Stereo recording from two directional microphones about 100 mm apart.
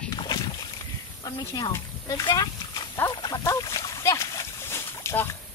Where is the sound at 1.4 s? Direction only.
40° left (ahead or behind).